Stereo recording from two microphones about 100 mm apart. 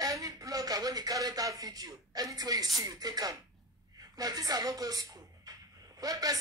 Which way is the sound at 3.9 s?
40° right (ahead or behind).